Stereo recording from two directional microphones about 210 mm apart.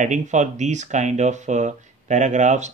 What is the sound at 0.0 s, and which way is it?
Speech, 35° right (ahead or behind).